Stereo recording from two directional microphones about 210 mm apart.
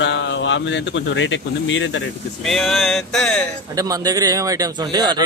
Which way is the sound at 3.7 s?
15° right (ahead or behind).